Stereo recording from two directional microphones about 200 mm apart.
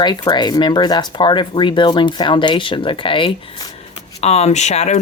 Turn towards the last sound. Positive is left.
turn(degrees=35)  # may be behind; listen again after turning